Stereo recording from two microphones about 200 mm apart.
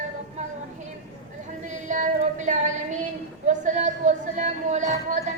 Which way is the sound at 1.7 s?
40° right (ahead or behind).